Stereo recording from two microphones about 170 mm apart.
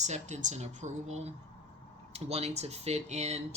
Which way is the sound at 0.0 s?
45° right (ahead or behind).